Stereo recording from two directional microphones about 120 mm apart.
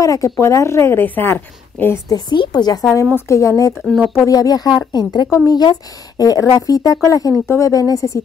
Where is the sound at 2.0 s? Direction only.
35° left (ahead or behind).